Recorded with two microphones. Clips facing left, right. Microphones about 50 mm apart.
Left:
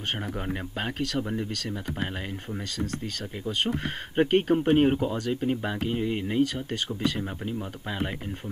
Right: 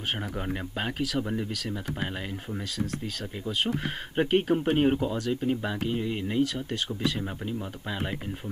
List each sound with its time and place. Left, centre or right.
0.2 s speech: centre
3.4 s speech: centre